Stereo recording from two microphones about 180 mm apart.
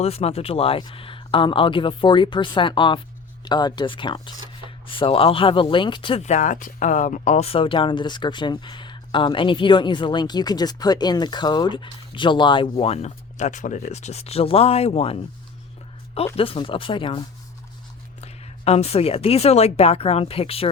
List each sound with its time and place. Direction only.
0.0 s speech: 35° left (ahead or behind)